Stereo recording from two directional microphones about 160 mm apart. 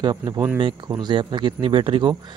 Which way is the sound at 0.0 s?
25° right (ahead or behind).